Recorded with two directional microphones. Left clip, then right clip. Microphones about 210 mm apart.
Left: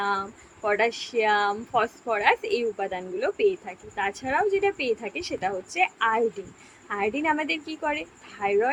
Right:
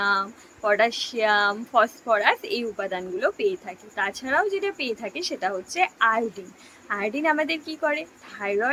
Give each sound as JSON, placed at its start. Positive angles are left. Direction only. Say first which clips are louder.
{"t": 0.0, "sound": "speech", "louder": "right 4 dB", "side_deg": -15}